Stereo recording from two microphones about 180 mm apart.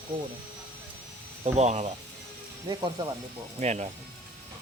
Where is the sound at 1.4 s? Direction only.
40° right (ahead or behind).